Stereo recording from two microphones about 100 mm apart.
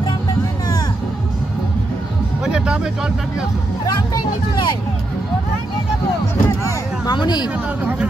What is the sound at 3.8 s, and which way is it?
Vehicle, 40° left (ahead or behind).